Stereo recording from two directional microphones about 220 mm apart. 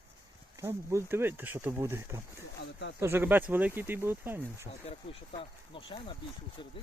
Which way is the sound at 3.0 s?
10° right (ahead or behind).